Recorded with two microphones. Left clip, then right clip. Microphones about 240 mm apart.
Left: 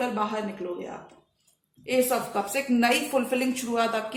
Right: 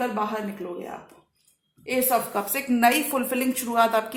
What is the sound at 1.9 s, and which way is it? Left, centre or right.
A woman's voice, right.